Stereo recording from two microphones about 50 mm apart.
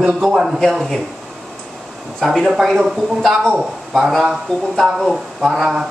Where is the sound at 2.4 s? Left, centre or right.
Centre.